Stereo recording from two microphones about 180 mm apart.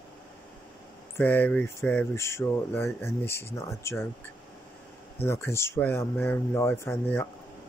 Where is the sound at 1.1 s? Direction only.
10° left (ahead or behind).